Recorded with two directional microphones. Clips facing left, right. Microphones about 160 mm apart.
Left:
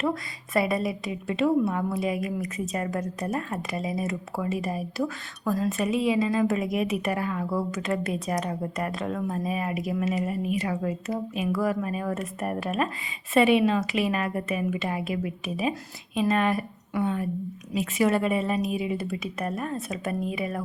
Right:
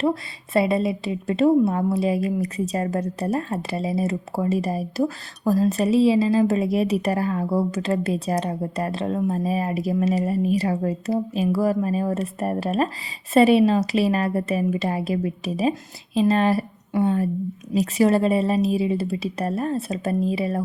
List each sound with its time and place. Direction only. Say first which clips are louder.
0.0 s a woman's voice: right 5 dB; 30° right (ahead or behind)